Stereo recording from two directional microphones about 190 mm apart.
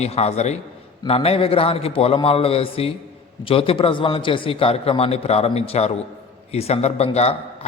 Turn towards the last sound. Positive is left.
turn(degrees=35)  # may be behind; listen again after turning